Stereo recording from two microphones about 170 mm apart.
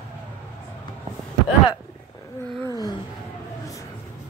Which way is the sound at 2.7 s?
25° left (ahead or behind).